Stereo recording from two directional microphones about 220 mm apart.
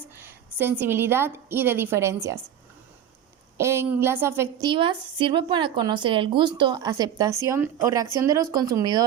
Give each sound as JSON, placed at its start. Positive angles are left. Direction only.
{"t": 0.2, "sound": "a woman's voice", "side_deg": -10}
{"t": 3.6, "sound": "a woman's voice", "side_deg": -10}